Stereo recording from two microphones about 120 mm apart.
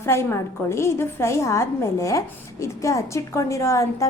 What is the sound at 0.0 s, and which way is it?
A woman's voice, 20° left (ahead or behind).